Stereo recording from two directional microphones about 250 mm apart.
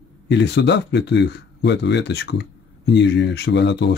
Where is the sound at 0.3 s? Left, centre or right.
Left.